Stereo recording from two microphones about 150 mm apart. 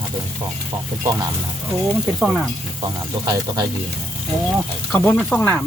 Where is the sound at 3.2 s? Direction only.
25° right (ahead or behind).